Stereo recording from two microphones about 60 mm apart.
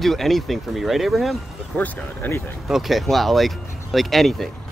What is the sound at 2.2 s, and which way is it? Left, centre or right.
Speech, left.